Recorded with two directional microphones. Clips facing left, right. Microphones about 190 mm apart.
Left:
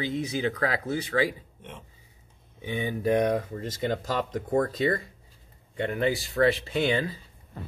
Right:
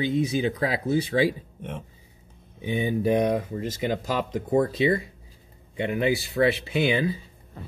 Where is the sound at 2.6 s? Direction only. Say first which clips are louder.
Right 5 dB; 20° right (ahead or behind).